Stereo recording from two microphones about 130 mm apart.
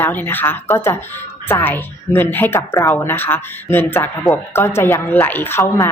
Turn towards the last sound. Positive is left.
turn(degrees=20)  # may be behind; listen again after turning